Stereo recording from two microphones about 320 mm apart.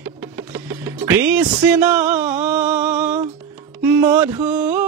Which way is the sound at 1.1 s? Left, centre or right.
Centre.